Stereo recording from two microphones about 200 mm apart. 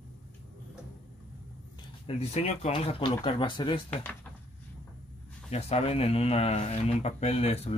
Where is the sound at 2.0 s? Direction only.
30° left (ahead or behind).